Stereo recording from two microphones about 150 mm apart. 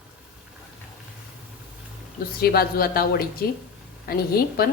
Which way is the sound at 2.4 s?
90° left.